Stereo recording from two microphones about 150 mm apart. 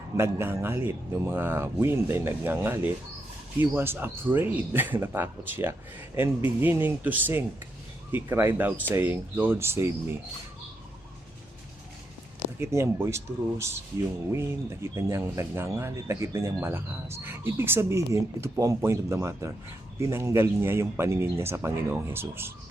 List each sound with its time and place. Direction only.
0.2 s speech: 15° right (ahead or behind)
12.5 s speech: 15° right (ahead or behind)